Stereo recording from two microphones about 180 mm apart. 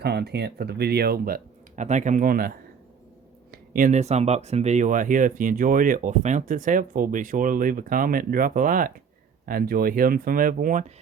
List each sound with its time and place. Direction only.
0.0 s speech: 65° right (ahead or behind)
3.5 s speech: 50° right (ahead or behind)